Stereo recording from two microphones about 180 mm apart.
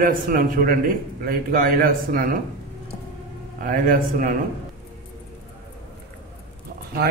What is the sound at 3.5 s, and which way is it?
Speech, 50° right (ahead or behind).